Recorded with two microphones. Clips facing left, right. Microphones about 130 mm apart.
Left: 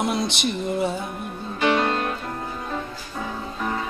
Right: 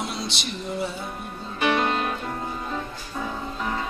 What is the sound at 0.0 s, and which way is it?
Music, 55° left (ahead or behind).